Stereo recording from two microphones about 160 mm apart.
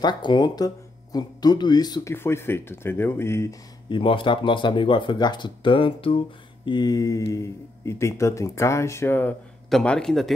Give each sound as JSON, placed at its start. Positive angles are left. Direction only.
{"t": 0.0, "sound": "speech", "side_deg": 25}
{"t": 2.1, "sound": "speech", "side_deg": 15}
{"t": 3.9, "sound": "speech", "side_deg": 35}
{"t": 9.7, "sound": "a man's voice", "side_deg": 5}